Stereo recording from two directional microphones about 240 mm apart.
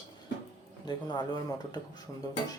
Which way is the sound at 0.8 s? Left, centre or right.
Centre.